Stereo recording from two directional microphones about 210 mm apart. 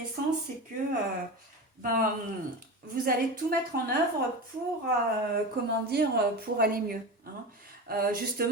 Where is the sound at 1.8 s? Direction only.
40° right (ahead or behind).